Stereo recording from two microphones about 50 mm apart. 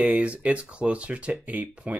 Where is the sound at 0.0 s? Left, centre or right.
Right.